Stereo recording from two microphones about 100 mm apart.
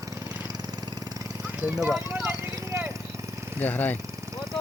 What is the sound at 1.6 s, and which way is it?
Speech, 5° right (ahead or behind).